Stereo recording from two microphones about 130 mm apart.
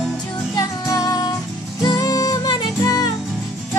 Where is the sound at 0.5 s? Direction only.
25° left (ahead or behind).